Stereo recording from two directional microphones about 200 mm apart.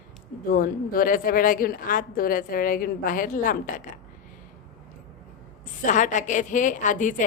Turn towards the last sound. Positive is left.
turn(degrees=40)  # may be behind; listen again after turning